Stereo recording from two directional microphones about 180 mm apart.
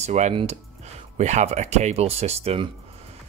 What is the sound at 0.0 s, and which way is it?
Speech, 40° right (ahead or behind).